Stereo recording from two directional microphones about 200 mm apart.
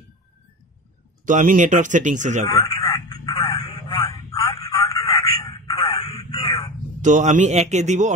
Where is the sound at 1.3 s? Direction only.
40° right (ahead or behind).